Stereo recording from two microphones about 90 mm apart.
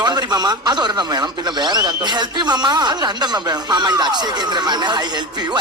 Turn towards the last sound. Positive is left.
turn(degrees=-55)  # may be behind; listen again after turning